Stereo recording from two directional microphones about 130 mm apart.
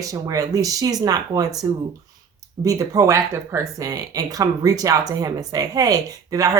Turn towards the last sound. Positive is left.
turn(degrees=-25)  # may be behind; listen again after turning